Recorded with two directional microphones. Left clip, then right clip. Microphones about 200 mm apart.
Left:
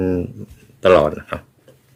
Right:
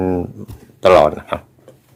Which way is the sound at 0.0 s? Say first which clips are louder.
Right 1 dB; 40° left (ahead or behind).